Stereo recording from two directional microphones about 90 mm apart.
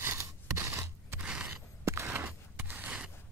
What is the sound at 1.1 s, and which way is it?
Scissors, 10° right (ahead or behind).